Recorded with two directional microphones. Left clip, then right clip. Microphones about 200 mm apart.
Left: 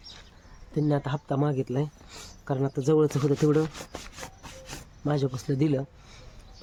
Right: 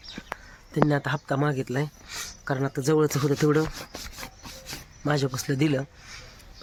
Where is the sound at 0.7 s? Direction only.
5° right (ahead or behind).